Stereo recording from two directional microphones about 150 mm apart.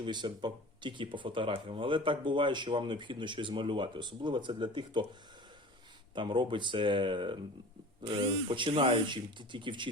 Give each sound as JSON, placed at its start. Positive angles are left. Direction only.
{"t": 0.0, "sound": "speech", "side_deg": -30}
{"t": 6.1, "sound": "speech", "side_deg": -30}